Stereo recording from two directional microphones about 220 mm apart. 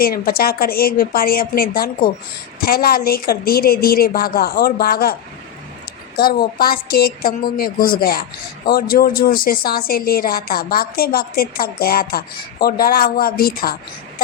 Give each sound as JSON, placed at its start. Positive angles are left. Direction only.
{"t": 0.0, "sound": "a woman's voice", "side_deg": 45}
{"t": 6.1, "sound": "a woman's voice", "side_deg": 40}